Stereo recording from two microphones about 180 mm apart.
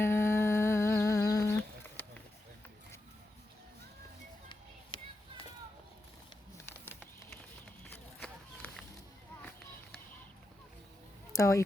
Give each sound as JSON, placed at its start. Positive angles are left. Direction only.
{"t": 0.0, "sound": "humming", "side_deg": 15}
{"t": 6.7, "sound": "a sound", "side_deg": 10}
{"t": 7.9, "sound": "run", "side_deg": 10}
{"t": 11.3, "sound": "speech", "side_deg": 15}